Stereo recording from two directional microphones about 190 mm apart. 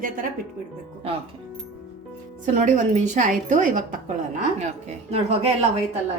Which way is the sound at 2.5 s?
40° right (ahead or behind).